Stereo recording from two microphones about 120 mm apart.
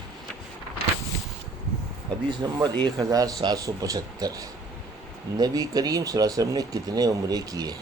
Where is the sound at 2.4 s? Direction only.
35° right (ahead or behind).